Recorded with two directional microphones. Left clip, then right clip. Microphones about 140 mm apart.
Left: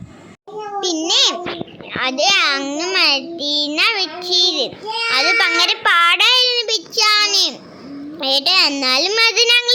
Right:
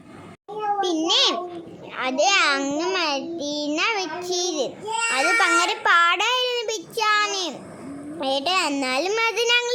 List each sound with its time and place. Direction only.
0.8 s a child's voice: 5° left (ahead or behind)